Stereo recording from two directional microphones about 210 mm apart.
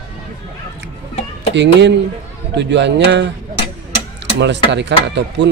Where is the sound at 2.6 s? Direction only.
55° right (ahead or behind).